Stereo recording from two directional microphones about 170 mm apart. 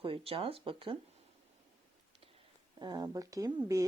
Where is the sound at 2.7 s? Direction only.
25° right (ahead or behind).